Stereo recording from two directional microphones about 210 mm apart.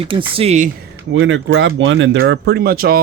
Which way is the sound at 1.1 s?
65° right (ahead or behind).